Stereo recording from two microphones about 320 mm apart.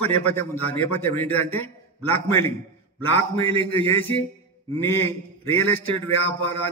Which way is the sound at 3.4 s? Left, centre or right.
Centre.